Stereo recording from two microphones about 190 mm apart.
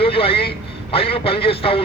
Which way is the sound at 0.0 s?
30° left (ahead or behind).